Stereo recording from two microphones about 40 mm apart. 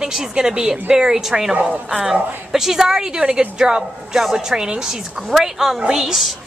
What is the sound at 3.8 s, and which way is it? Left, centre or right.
A woman's voice, centre.